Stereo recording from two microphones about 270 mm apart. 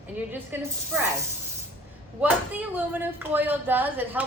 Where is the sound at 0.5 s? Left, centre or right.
Centre.